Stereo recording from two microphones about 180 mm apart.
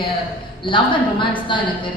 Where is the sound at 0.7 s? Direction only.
30° left (ahead or behind).